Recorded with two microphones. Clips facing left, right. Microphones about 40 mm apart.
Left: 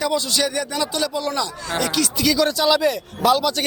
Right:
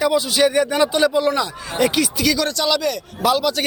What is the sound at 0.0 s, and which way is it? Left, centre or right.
Speech, centre.